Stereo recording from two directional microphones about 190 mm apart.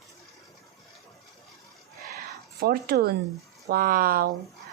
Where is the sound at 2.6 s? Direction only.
55° right (ahead or behind).